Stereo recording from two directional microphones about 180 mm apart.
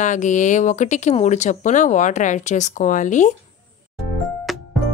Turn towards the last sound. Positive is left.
turn(degrees=0)  # may be behind; listen again after turning